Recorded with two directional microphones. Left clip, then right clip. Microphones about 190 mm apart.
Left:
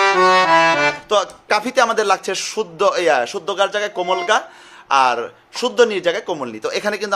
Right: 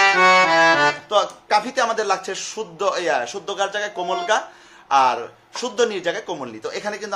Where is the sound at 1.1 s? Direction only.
50° left (ahead or behind).